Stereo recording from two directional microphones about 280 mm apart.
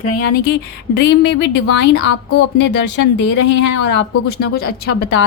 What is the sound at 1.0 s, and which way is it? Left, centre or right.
Speech, left.